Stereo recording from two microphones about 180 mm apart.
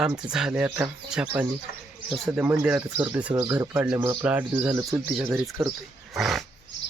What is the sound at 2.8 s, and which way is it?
Speech, 20° right (ahead or behind).